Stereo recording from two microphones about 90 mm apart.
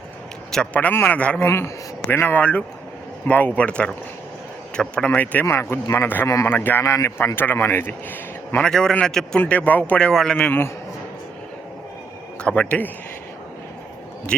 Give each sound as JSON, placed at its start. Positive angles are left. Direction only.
{"t": 0.5, "sound": "speech", "side_deg": 10}
{"t": 1.5, "sound": "speech", "side_deg": 30}
{"t": 8.5, "sound": "speech", "side_deg": 10}
{"t": 12.4, "sound": "speech", "side_deg": 10}